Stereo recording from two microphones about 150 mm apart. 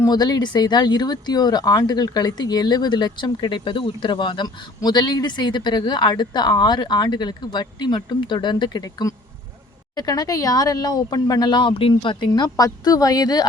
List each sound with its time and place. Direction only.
0.0 s speech: 25° left (ahead or behind)
12.3 s speech: 25° left (ahead or behind)